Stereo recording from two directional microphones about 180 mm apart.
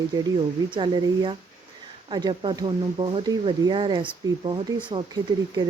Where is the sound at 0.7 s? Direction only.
25° right (ahead or behind).